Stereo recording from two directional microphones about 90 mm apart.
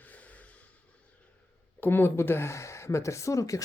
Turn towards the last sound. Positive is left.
turn(degrees=35)  # may be behind; listen again after turning